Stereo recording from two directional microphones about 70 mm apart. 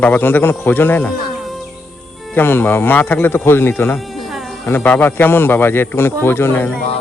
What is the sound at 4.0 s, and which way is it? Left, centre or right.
Music, centre.